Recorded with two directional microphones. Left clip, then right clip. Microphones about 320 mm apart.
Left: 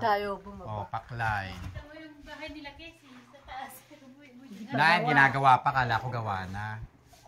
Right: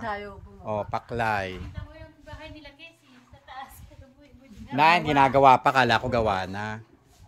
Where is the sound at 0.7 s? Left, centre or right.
Centre.